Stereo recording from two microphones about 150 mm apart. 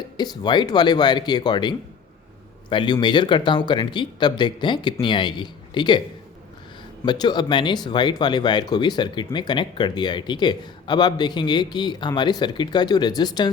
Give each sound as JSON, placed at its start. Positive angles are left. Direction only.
{"t": 0.2, "sound": "speech", "side_deg": 30}
{"t": 7.0, "sound": "speech", "side_deg": 30}